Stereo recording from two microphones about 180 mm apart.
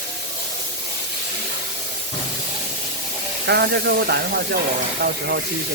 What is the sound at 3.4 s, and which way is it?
Speech, 65° right (ahead or behind).